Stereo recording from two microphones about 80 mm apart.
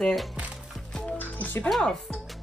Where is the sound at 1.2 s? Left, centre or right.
Left.